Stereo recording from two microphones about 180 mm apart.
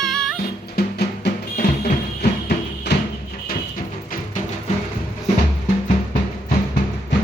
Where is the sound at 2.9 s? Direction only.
70° left (ahead or behind).